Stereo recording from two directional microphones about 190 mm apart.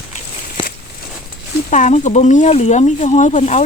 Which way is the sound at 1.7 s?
40° left (ahead or behind).